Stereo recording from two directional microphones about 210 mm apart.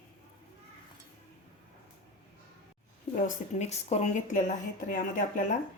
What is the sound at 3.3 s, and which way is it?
Speech, 35° left (ahead or behind).